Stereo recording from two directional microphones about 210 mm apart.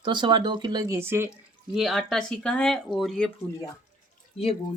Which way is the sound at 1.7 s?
Centre (ahead or behind).